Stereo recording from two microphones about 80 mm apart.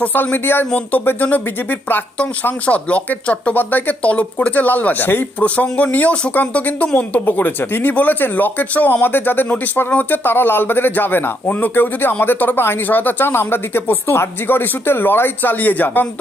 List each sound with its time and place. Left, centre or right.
0.0 s speech: left